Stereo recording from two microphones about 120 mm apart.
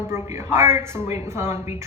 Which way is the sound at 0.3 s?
20° right (ahead or behind).